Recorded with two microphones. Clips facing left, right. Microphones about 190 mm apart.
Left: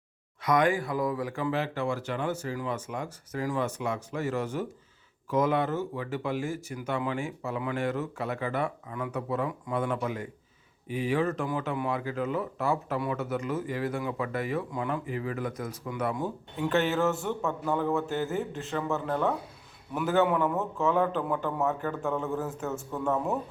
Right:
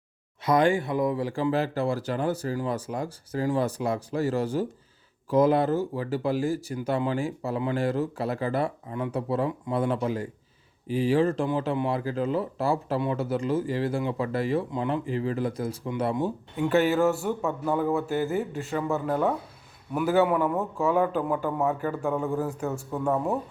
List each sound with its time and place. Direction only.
0.4 s speech: 30° right (ahead or behind)
16.6 s a man's voice: 10° right (ahead or behind)
18.9 s a man's voice: 10° right (ahead or behind)